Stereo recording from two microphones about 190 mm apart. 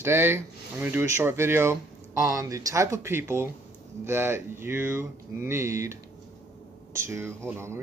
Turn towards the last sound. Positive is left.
turn(degrees=-15)  # may be behind; listen again after turning